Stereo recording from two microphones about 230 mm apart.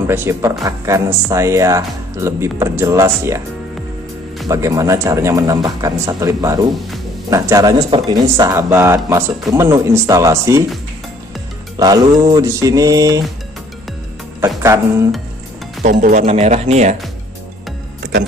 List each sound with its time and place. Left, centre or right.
0.0 s speech: centre
4.5 s speech: centre
11.7 s speech: centre
15.8 s speech: right